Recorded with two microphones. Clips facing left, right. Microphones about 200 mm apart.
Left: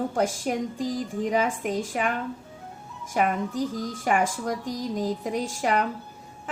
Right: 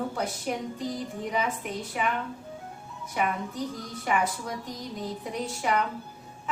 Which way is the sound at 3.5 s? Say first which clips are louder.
Left 6 dB; 90° left.